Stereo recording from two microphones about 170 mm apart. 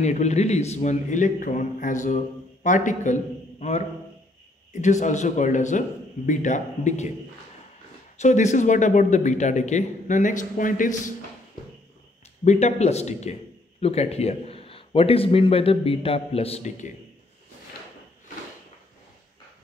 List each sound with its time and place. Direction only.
0.0 s a man's voice: 40° left (ahead or behind)
4.8 s a man's voice: 45° left (ahead or behind)
8.2 s a man's voice: 45° left (ahead or behind)
12.4 s a man's voice: 40° left (ahead or behind)